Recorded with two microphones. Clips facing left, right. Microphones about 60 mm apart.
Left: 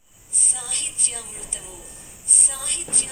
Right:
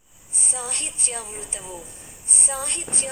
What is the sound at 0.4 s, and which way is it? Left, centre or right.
A woman's voice, right.